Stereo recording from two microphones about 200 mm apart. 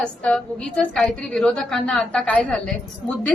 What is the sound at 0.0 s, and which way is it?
A woman's voice, 5° left (ahead or behind).